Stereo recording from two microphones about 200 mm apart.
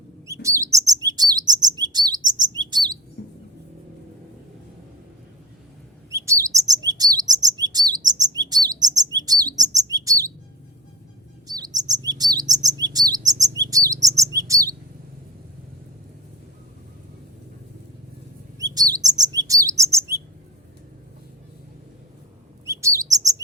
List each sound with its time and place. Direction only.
0.4 s chirp: 15° right (ahead or behind)
3.2 s music: 60° left (ahead or behind)
6.1 s chirp: 15° right (ahead or behind)
11.4 s chirp: 20° right (ahead or behind)
18.6 s chirp: 20° right (ahead or behind)
22.6 s chirp: 15° right (ahead or behind)